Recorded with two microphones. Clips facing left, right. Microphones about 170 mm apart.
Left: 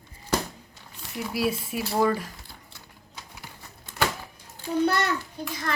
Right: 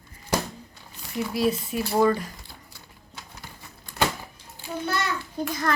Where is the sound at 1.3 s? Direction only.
5° left (ahead or behind).